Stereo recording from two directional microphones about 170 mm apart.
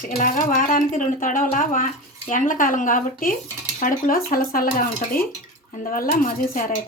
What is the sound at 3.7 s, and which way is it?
Cutlery, 55° left (ahead or behind).